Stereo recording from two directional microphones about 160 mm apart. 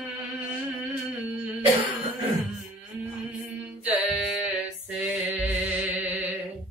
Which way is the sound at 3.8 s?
5° right (ahead or behind).